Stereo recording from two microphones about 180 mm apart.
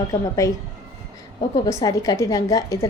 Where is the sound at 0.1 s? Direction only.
20° left (ahead or behind).